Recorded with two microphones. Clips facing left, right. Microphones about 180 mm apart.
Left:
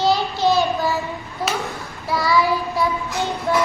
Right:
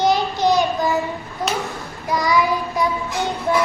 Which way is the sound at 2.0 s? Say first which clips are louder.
Even; 20° right (ahead or behind).